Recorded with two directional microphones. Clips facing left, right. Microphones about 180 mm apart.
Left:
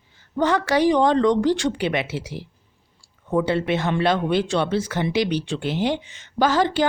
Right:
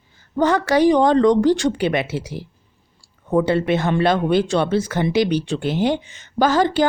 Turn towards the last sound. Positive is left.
turn(degrees=-45)  # may be behind; listen again after turning